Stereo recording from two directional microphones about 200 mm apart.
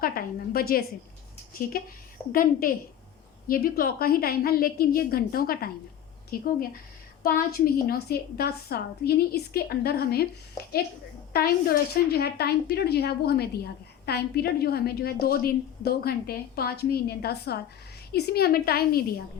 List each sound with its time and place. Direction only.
0.0 s a woman's voice: 45° left (ahead or behind)
11.3 s a woman's voice: 50° left (ahead or behind)